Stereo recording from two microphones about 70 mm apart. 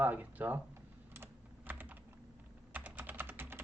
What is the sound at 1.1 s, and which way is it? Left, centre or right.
Typing, right.